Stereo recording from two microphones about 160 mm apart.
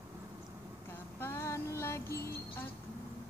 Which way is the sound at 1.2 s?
15° left (ahead or behind).